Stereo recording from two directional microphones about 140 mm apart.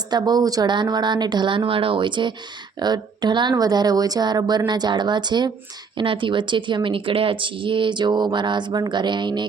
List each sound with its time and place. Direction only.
0.1 s speech: 30° right (ahead or behind)